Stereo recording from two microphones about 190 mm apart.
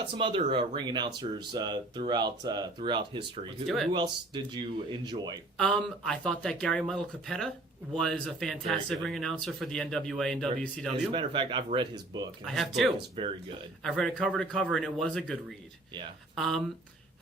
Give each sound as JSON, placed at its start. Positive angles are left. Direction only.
{"t": 0.1, "sound": "speech", "side_deg": -25}
{"t": 5.5, "sound": "speech", "side_deg": 5}
{"t": 11.1, "sound": "speech", "side_deg": -25}
{"t": 12.5, "sound": "speech", "side_deg": 0}
{"t": 13.2, "sound": "speech", "side_deg": -25}
{"t": 13.8, "sound": "speech", "side_deg": 0}